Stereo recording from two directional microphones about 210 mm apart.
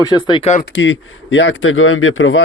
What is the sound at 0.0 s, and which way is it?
Speech, 20° left (ahead or behind).